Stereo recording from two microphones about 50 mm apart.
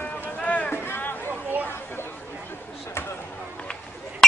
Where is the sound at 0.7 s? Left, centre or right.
Left.